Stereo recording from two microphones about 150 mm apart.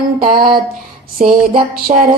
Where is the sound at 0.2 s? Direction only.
75° right (ahead or behind).